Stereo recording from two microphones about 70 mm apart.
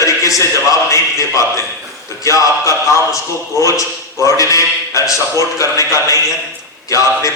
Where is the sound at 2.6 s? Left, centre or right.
Left.